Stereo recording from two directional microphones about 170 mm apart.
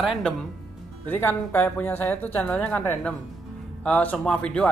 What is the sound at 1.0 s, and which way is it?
Speech, 10° left (ahead or behind).